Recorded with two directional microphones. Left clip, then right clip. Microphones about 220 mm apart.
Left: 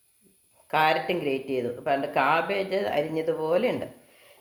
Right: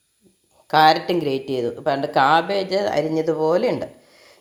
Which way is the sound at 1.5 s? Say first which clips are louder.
Right 5 dB; 30° right (ahead or behind).